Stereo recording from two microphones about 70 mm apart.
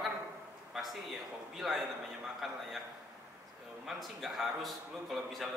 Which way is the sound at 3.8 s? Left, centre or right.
Centre.